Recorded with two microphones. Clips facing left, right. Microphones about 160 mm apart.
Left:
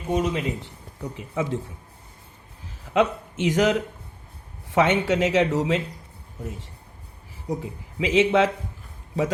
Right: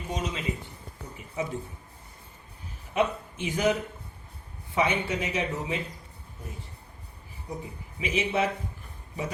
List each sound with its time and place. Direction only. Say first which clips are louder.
0.1 s a man's voice: left 8 dB; 60° left (ahead or behind)
1.1 s speech: left 5 dB; 90° left
2.9 s speech: left 5 dB; 90° left
7.4 s speech: left 8 dB; 90° left